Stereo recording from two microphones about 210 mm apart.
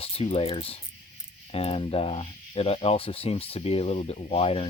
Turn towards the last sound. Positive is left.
turn(degrees=25)  # may be behind; listen again after turning